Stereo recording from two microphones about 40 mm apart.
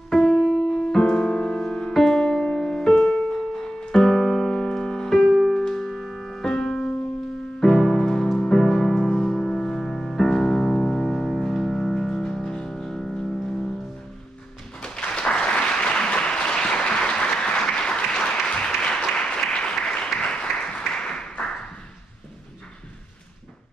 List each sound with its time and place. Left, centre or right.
0.1 s music: centre
5.2 s music: centre
5.6 s music: centre
13.0 s music: centre
14.8 s applause: left